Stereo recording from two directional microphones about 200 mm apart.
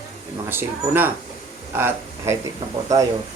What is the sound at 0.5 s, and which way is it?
Speech, 10° right (ahead or behind).